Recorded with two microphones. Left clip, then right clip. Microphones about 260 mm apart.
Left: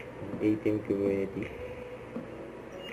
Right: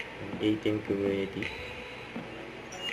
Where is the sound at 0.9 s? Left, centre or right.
Right.